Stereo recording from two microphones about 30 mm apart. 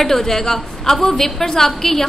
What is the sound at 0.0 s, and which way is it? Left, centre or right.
A woman's voice, centre.